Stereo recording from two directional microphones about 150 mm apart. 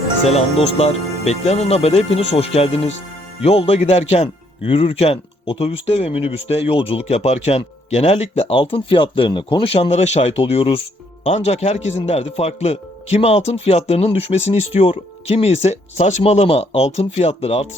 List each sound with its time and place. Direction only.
0.3 s speech: 45° left (ahead or behind)